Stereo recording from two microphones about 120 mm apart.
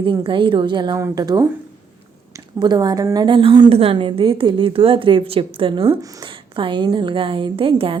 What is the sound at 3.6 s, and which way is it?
A woman's voice, 50° right (ahead or behind).